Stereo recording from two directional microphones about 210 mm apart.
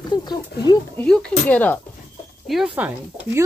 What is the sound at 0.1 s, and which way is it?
Speech, 20° left (ahead or behind).